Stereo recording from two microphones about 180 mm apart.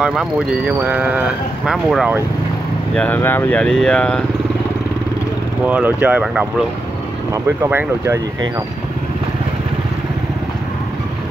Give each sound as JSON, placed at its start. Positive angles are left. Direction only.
{"t": 0.0, "sound": "speech", "side_deg": -5}
{"t": 5.7, "sound": "speech", "side_deg": -10}
{"t": 7.6, "sound": "speech", "side_deg": -15}